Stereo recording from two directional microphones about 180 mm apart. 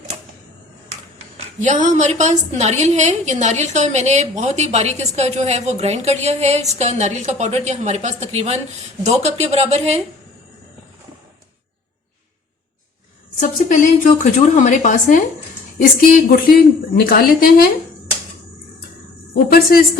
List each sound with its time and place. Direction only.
1.6 s a woman's voice: 45° right (ahead or behind)
13.4 s speech: 45° left (ahead or behind)
15.8 s a woman's voice: 55° left (ahead or behind)
19.5 s a woman's voice: 55° left (ahead or behind)